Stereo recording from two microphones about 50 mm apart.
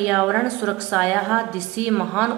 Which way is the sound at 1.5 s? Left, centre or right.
Right.